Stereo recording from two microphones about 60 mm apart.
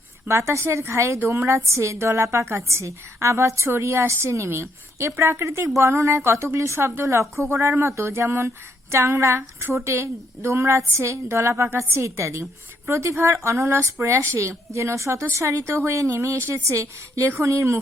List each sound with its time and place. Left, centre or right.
0.3 s a woman's voice: right